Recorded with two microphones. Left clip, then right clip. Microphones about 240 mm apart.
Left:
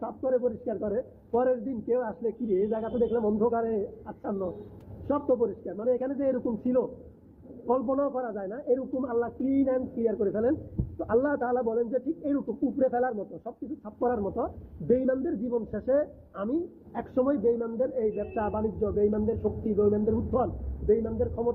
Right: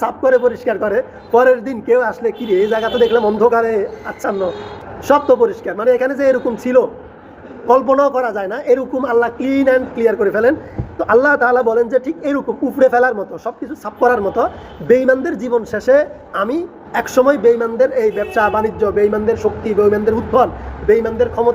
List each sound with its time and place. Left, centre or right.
0.0 s a man's voice: right
3.2 s a man's voice: right
3.5 s a man's voice: centre
5.1 s a man's voice: centre